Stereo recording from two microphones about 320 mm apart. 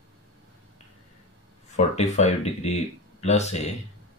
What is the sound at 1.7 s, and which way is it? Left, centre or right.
Speech, left.